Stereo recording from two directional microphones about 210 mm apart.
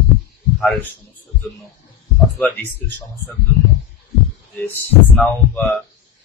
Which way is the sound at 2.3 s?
5° left (ahead or behind).